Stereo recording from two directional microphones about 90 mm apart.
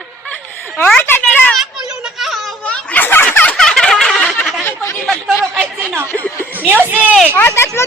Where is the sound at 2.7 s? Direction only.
20° left (ahead or behind).